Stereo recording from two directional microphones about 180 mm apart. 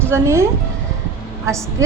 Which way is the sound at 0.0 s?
15° right (ahead or behind).